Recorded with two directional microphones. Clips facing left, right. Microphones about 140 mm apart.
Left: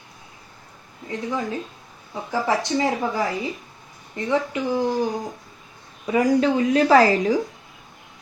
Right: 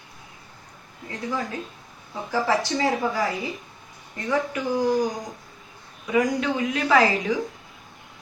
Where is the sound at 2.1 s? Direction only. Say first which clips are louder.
Even; 20° left (ahead or behind).